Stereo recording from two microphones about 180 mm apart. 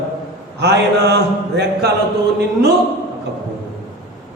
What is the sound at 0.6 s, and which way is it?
Speech, 70° right (ahead or behind).